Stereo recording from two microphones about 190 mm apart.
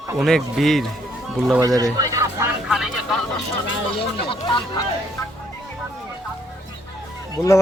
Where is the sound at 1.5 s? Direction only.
20° right (ahead or behind).